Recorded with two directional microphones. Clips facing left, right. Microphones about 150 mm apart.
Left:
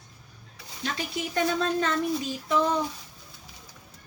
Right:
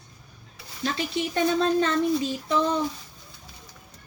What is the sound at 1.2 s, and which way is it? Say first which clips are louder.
Speech: right 3 dB; 30° right (ahead or behind).